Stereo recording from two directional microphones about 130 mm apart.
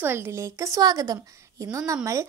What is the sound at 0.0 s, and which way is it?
A woman's voice, 20° right (ahead or behind).